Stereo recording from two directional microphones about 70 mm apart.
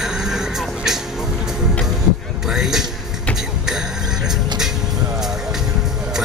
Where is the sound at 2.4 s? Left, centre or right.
Centre.